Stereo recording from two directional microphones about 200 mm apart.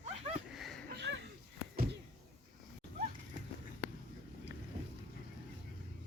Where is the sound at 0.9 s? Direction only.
60° right (ahead or behind).